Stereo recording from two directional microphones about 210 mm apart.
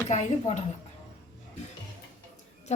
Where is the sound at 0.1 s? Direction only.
35° left (ahead or behind).